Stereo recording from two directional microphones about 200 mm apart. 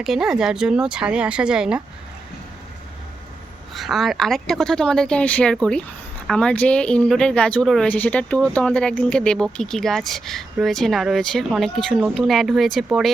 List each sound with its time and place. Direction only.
0.0 s speech: centre (ahead or behind)
3.8 s speech: centre (ahead or behind)